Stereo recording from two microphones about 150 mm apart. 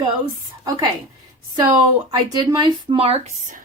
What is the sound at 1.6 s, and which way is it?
Speech, 30° right (ahead or behind).